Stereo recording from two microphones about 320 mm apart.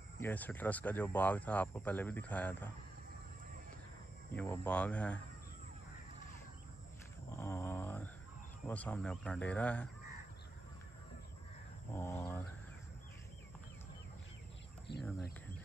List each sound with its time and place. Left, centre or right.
0.2 s speech: centre
4.4 s speech: centre
7.2 s a sound: centre
8.6 s speech: centre
11.9 s speech: centre
14.9 s speech: left